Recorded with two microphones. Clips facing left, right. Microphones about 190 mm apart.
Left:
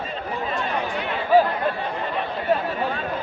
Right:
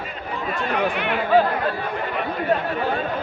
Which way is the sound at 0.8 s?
70° right (ahead or behind).